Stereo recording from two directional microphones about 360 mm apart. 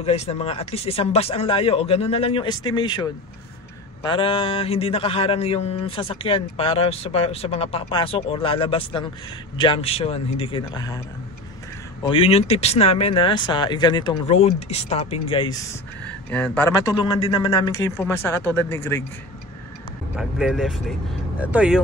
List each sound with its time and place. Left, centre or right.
0.0 s a man's voice: centre
12.0 s a man's voice: centre
20.2 s speech: centre